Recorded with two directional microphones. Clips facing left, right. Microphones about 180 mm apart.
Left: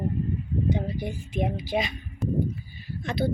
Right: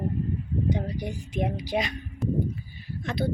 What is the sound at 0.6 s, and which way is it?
Speech, 15° right (ahead or behind).